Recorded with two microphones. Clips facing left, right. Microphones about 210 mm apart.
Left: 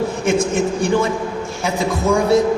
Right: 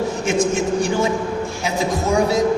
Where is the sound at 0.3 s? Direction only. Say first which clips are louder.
Left 1 dB; 55° left (ahead or behind).